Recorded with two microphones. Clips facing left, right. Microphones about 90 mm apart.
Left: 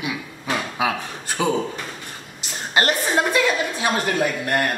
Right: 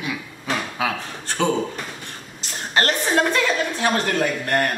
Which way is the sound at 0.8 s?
15° left (ahead or behind).